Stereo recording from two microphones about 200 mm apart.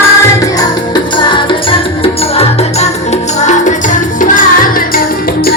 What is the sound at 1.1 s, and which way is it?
Music, 25° left (ahead or behind).